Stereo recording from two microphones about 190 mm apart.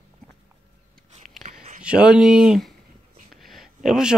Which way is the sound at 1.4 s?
40° right (ahead or behind).